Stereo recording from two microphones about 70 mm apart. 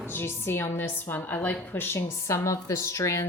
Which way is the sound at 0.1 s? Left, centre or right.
Left.